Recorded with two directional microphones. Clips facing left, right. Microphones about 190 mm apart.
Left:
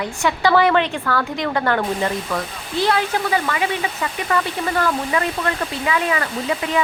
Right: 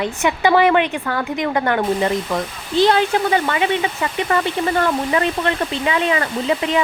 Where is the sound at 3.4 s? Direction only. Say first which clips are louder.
Right 3 dB; 25° right (ahead or behind).